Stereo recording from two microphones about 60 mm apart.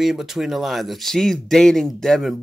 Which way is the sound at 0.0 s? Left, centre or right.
Centre.